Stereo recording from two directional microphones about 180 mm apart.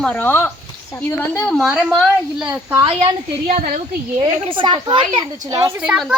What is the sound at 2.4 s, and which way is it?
Speech, 10° right (ahead or behind).